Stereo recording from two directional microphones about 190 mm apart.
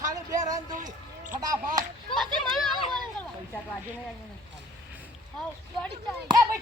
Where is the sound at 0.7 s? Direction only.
45° right (ahead or behind).